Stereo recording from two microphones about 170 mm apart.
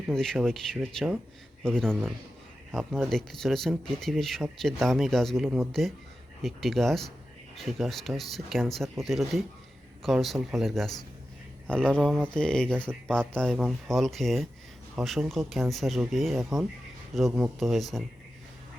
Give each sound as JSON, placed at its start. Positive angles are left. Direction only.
{"t": 0.1, "sound": "speech", "side_deg": 5}